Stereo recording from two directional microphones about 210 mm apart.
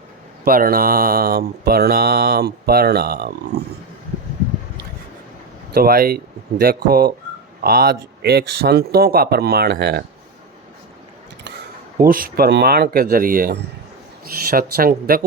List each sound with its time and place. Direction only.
0.4 s speech: 45° right (ahead or behind)
5.7 s speech: 45° right (ahead or behind)
12.0 s speech: 40° right (ahead or behind)